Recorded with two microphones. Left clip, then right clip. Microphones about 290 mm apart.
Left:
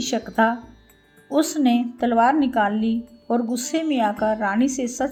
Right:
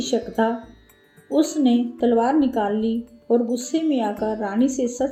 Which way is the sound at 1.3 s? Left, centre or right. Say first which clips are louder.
Even; left.